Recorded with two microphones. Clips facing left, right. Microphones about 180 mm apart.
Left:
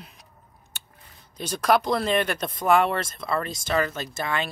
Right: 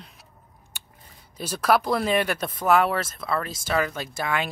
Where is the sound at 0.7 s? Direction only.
15° right (ahead or behind).